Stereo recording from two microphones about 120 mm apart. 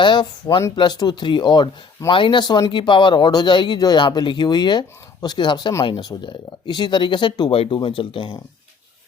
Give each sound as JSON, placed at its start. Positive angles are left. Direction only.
{"t": 0.0, "sound": "speech", "side_deg": 40}